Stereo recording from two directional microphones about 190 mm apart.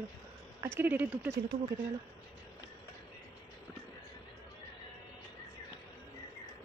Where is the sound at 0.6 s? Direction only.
10° right (ahead or behind).